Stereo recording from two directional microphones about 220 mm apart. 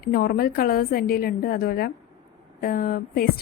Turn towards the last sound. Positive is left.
turn(degrees=40)  # may be behind; listen again after turning